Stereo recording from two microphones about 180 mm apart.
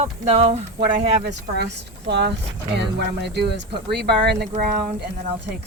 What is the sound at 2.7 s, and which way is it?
Speech, 65° right (ahead or behind).